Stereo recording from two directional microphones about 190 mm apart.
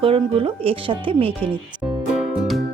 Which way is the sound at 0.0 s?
30° right (ahead or behind).